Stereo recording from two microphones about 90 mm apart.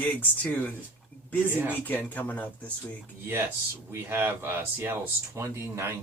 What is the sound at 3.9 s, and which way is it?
Speech, 25° right (ahead or behind).